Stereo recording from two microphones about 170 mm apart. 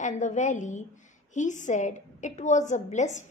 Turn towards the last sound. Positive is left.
turn(degrees=45)  # may be behind; listen again after turning